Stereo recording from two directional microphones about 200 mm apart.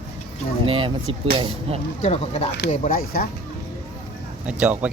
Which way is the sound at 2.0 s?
30° left (ahead or behind).